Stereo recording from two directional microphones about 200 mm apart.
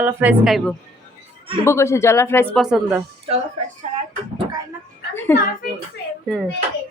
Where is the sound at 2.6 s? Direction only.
5° right (ahead or behind).